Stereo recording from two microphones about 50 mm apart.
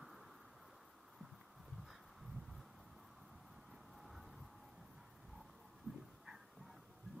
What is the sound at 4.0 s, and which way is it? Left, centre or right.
Vehicle, centre.